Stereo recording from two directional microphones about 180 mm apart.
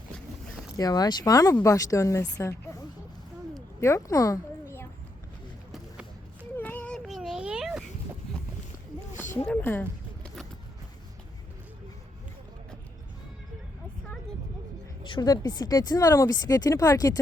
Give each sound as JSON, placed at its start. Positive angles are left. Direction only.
{"t": 0.8, "sound": "speech", "side_deg": 20}
{"t": 3.8, "sound": "speech", "side_deg": 15}
{"t": 6.6, "sound": "baby cry", "side_deg": 10}
{"t": 9.5, "sound": "speech", "side_deg": 10}
{"t": 15.0, "sound": "speech", "side_deg": 25}